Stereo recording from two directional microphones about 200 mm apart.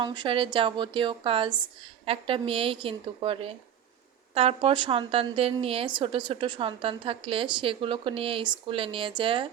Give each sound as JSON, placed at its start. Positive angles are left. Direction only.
{"t": 0.0, "sound": "a woman's voice", "side_deg": -25}